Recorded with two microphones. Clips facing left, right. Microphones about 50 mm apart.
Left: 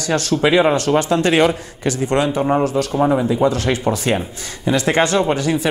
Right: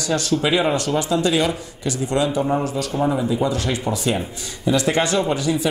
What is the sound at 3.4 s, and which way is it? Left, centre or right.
A man's voice, left.